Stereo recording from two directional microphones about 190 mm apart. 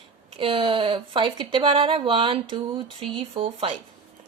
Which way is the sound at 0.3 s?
25° right (ahead or behind).